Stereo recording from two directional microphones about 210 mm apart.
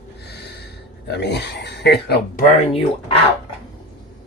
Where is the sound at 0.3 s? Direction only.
50° left (ahead or behind).